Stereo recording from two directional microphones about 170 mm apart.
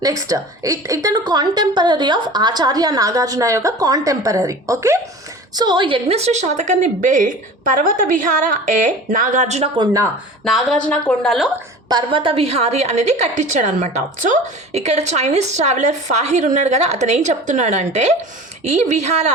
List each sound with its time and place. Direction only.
0.0 s a woman's voice: 20° right (ahead or behind); by 9.6 s 45° right (ahead or behind)
9.7 s a woman's voice: 20° right (ahead or behind)
10.4 s a woman's voice: centre (ahead or behind)
11.9 s a woman's voice: 25° right (ahead or behind)